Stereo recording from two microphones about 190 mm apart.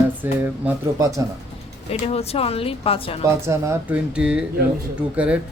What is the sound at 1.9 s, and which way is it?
Speech, 30° left (ahead or behind).